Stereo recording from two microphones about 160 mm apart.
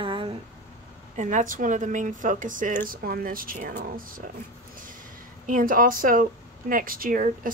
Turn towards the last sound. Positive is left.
turn(degrees=-60)  # may be behind; listen again after turning